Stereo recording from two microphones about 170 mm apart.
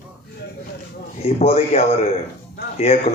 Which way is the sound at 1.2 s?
35° left (ahead or behind).